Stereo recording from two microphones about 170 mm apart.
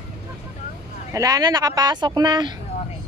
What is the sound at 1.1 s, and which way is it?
A man's voice, 20° right (ahead or behind).